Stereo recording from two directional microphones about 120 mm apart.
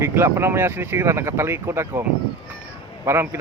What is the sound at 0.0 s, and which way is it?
Speech, 20° right (ahead or behind).